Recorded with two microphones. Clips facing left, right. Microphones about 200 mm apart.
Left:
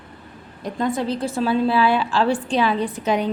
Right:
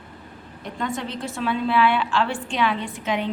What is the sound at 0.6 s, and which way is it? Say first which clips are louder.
Speech: left 6 dB; 35° left (ahead or behind).